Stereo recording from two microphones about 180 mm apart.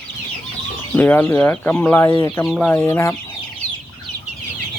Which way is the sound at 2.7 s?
15° left (ahead or behind).